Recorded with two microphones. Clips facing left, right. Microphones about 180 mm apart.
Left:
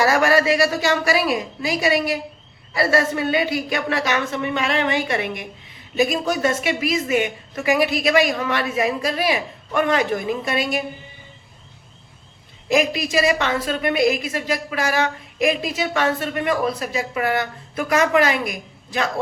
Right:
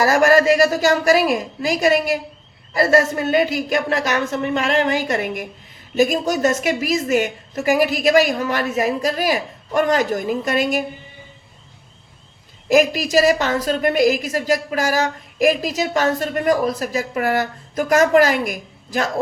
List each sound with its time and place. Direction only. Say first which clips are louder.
0.0 s a woman's voice: right 3 dB; 45° right (ahead or behind)
12.6 s a woman's voice: right 4 dB; 45° right (ahead or behind)